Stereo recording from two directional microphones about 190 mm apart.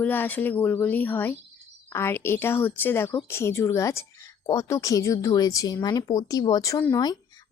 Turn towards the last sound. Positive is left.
turn(degrees=20)  # may be behind; listen again after turning